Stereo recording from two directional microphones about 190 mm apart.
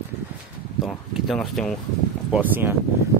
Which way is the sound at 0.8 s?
Centre (ahead or behind).